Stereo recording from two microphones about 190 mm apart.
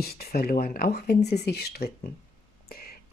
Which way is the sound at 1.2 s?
35° left (ahead or behind).